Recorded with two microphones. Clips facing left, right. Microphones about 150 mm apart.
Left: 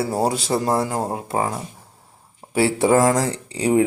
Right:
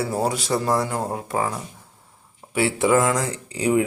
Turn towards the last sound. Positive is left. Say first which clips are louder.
# left 2 dB
turn(degrees=30)  # may be behind; listen again after turning